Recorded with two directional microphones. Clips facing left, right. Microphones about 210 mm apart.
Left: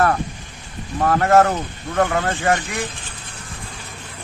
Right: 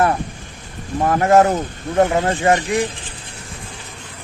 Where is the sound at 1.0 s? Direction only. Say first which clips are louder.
Right 1 dB; 20° right (ahead or behind).